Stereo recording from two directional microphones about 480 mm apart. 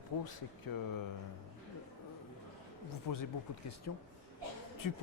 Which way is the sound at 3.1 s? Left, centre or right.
Left.